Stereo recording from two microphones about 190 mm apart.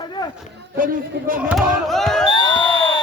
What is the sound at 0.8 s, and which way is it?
Speech, 45° right (ahead or behind).